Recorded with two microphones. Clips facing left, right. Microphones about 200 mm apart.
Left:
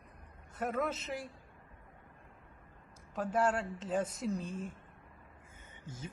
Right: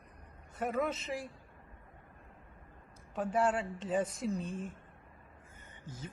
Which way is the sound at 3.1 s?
5° right (ahead or behind).